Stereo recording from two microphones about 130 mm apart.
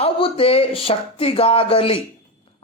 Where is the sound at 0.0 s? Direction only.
45° left (ahead or behind).